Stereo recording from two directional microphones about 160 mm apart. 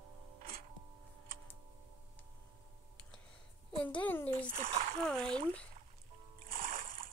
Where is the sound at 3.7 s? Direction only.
10° left (ahead or behind).